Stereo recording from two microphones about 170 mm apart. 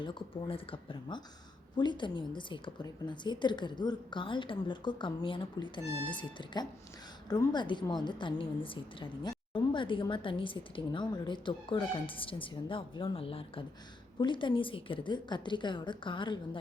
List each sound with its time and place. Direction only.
0.0 s a woman's voice: 30° left (ahead or behind)